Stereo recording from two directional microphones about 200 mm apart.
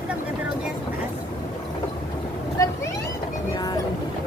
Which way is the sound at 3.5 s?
20° left (ahead or behind).